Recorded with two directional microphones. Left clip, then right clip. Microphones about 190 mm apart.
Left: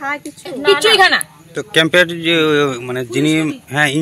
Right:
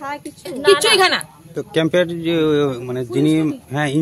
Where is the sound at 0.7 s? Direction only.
30° right (ahead or behind).